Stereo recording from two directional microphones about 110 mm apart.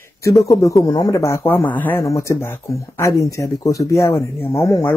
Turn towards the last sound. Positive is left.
turn(degrees=20)  # may be behind; listen again after turning